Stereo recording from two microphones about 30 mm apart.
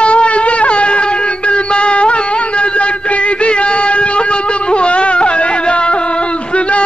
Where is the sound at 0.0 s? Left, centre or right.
Left.